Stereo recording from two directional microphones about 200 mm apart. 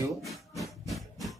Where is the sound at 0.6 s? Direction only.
Centre (ahead or behind).